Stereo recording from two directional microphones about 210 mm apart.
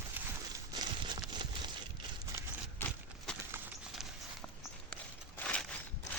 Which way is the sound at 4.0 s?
Centre (ahead or behind).